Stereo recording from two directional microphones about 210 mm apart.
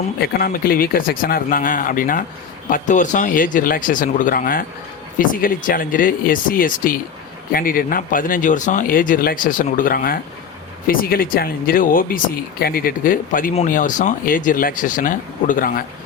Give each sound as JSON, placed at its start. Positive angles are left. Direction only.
{"t": 0.2, "sound": "speech", "side_deg": 45}